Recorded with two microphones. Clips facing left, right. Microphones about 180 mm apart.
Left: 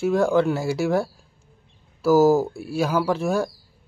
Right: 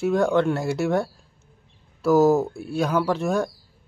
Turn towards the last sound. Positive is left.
turn(degrees=0)  # may be behind; listen again after turning